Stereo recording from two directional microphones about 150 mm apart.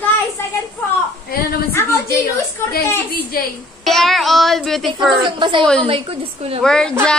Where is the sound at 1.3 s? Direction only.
90° left.